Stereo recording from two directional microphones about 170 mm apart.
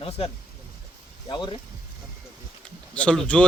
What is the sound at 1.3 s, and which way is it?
Speech, 25° left (ahead or behind).